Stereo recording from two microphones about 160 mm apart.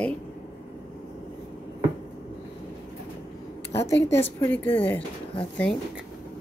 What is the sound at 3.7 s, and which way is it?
A woman's voice, 15° left (ahead or behind).